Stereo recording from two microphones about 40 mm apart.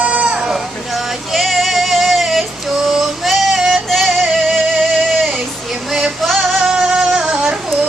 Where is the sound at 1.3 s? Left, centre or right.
Centre.